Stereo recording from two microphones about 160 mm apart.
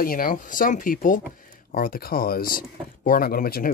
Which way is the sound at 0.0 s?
60° left (ahead or behind).